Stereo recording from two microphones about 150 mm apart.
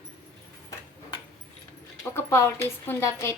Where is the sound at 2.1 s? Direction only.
20° left (ahead or behind).